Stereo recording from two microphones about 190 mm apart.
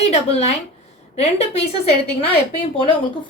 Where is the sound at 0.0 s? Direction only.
35° left (ahead or behind).